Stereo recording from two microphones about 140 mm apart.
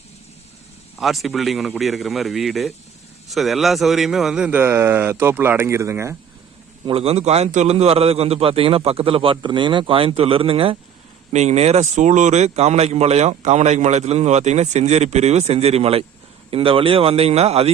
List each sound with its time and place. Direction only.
0.9 s a man's voice: centre (ahead or behind); by 6.1 s 20° right (ahead or behind)
6.8 s speech: 45° right (ahead or behind)
11.3 s speech: 50° right (ahead or behind)